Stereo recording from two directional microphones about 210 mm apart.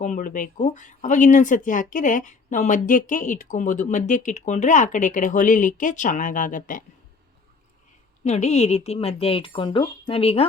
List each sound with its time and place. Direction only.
0.0 s speech: 40° left (ahead or behind)
8.2 s speech: 30° left (ahead or behind)